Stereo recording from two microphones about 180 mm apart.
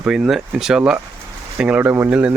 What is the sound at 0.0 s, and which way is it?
Speech, 5° right (ahead or behind).